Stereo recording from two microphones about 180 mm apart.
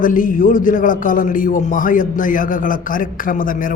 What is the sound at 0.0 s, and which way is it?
A man's voice, 50° left (ahead or behind).